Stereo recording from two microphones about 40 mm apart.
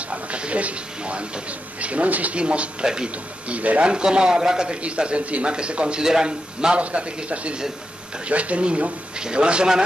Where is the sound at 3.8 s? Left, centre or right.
Right.